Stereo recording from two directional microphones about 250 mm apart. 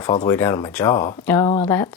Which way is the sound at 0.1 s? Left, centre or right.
Centre.